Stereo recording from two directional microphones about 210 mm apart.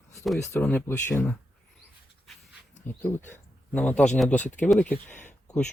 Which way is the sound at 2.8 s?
10° left (ahead or behind).